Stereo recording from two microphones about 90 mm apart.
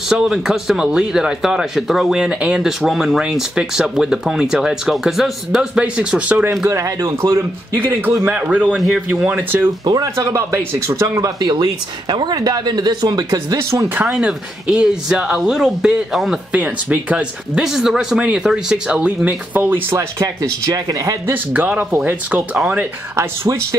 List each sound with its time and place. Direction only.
0.1 s speech: 5° right (ahead or behind)
6.6 s speech: 35° right (ahead or behind)
7.3 s a man's voice: 20° right (ahead or behind)
9.8 s speech: 50° right (ahead or behind)
10.1 s speech: 35° right (ahead or behind); by 13.6 s 50° right (ahead or behind)
13.6 s speech: 30° right (ahead or behind)
14.2 s speech: 10° right (ahead or behind)
16.5 s speech: 15° right (ahead or behind)
20.2 s speech: 40° right (ahead or behind)
21.3 s speech: 20° right (ahead or behind)
23.1 s speech: 30° right (ahead or behind)